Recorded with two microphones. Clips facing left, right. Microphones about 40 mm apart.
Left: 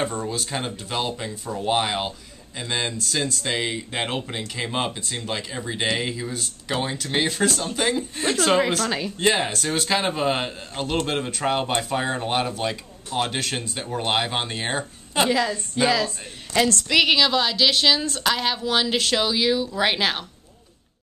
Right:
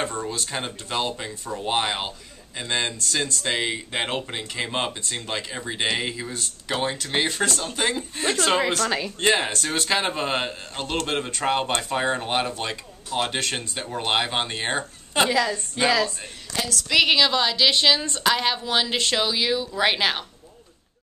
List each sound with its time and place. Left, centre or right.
0.0 s a man's voice: centre
16.5 s a woman's voice: left
16.9 s speech: centre